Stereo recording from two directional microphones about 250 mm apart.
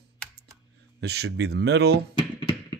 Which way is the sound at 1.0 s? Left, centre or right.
Right.